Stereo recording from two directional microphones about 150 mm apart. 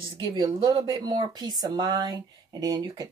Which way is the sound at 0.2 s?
30° right (ahead or behind).